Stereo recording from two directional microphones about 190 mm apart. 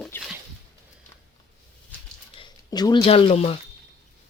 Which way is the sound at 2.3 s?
25° left (ahead or behind).